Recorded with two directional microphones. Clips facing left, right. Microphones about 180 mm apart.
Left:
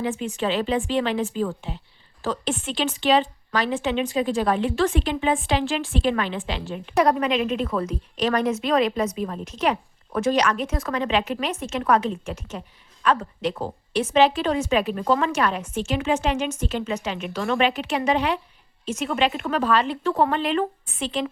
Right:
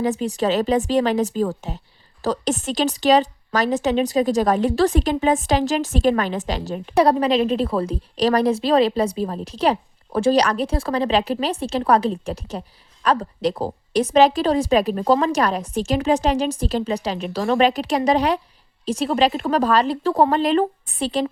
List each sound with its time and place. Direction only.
0.0 s a woman's voice: 40° right (ahead or behind)